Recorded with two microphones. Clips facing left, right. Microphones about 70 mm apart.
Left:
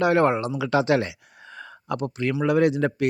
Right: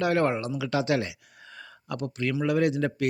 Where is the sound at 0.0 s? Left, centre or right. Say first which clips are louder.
Left 5 dB; left.